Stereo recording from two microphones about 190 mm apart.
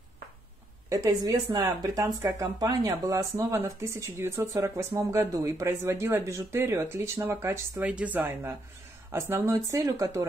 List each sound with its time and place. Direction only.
0.8 s speech: 15° right (ahead or behind)